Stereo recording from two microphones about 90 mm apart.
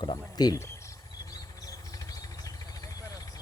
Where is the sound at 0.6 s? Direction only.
35° left (ahead or behind).